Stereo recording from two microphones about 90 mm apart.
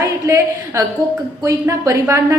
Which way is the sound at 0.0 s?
35° right (ahead or behind).